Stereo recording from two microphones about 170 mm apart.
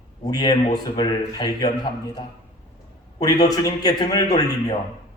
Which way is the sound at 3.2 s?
20° left (ahead or behind).